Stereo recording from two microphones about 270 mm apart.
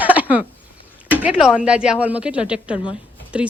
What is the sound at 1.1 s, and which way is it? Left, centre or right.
Speech, centre.